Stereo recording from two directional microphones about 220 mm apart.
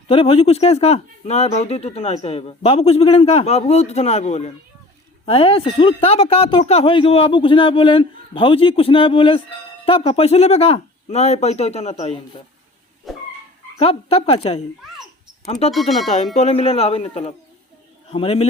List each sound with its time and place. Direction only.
0.1 s speech: 25° left (ahead or behind)
13.1 s speech: centre (ahead or behind)
13.7 s speech: 25° left (ahead or behind)
15.7 s speech: centre (ahead or behind)
16.0 s speech: 30° left (ahead or behind)